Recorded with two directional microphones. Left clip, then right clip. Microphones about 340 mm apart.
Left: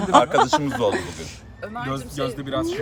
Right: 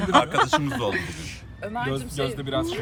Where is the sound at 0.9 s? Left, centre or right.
Centre.